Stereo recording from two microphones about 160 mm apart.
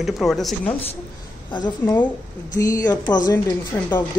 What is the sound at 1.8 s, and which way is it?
A woman's voice, 15° left (ahead or behind).